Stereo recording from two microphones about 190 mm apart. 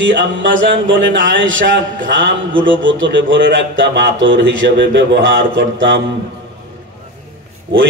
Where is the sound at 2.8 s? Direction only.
75° right (ahead or behind).